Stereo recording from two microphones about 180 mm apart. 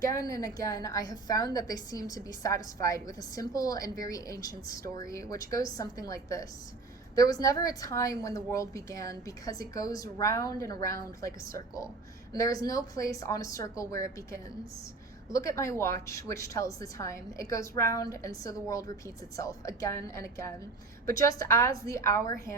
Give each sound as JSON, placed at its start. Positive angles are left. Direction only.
{"t": 0.2, "sound": "a woman's voice", "side_deg": 20}